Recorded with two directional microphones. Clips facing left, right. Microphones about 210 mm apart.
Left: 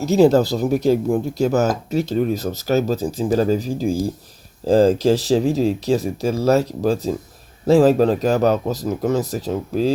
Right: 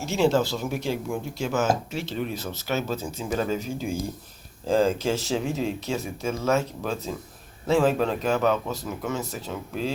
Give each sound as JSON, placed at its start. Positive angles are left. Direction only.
{"t": 0.0, "sound": "speech", "side_deg": 40}